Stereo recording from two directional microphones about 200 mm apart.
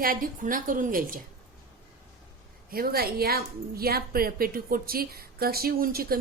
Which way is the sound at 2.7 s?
50° right (ahead or behind).